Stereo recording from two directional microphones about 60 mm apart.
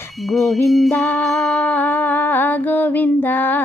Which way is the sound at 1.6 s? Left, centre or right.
Left.